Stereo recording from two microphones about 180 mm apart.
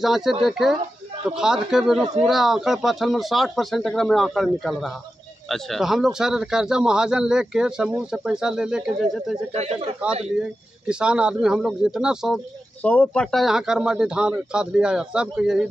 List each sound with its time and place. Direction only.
0.0 s speech: centre (ahead or behind)
9.6 s speech: 35° right (ahead or behind)
10.9 s speech: 5° right (ahead or behind)